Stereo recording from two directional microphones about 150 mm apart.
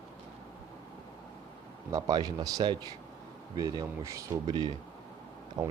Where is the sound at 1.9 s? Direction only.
25° right (ahead or behind).